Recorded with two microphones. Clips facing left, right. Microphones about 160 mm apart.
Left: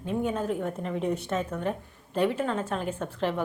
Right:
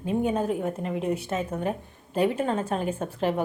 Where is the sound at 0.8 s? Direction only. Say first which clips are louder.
Right 1 dB; 5° right (ahead or behind).